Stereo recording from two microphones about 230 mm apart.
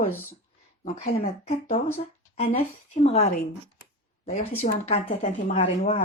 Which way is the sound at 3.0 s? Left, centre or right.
Left.